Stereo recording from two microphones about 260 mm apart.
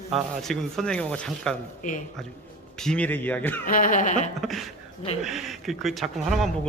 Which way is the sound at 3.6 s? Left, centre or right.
Left.